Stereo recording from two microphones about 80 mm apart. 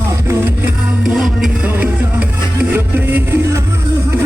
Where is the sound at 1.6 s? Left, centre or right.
Right.